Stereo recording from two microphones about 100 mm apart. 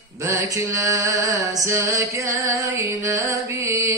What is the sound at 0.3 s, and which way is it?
Music, 30° right (ahead or behind).